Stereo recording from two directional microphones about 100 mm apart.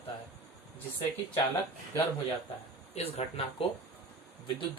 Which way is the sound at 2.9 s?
85° left.